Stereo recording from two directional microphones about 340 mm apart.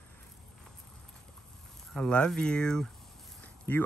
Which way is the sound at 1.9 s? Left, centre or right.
Centre.